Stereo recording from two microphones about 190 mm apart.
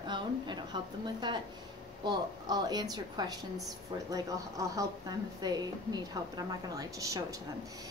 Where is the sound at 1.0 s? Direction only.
25° right (ahead or behind).